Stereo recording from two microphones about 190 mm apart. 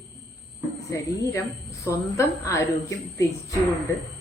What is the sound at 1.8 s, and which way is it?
A woman's voice, 15° left (ahead or behind).